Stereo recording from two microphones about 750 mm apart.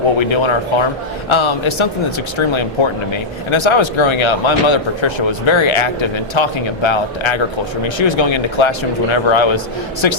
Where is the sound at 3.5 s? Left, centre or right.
Left.